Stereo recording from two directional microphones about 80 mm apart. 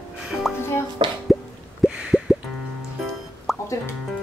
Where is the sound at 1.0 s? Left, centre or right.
Right.